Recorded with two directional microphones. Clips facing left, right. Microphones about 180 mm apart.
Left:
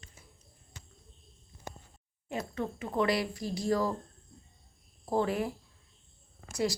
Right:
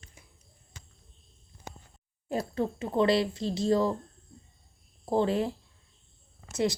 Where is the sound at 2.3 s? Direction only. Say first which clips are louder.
Right 5 dB; 35° right (ahead or behind).